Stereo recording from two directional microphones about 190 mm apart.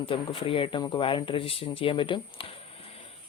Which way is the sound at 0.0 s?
30° left (ahead or behind).